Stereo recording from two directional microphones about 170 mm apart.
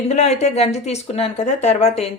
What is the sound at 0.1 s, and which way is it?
Speech, 40° left (ahead or behind).